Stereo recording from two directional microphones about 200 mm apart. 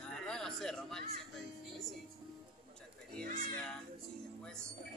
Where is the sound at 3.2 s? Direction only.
45° right (ahead or behind).